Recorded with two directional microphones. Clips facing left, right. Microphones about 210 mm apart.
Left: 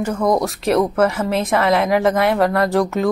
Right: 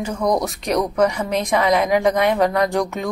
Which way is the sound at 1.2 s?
5° left (ahead or behind).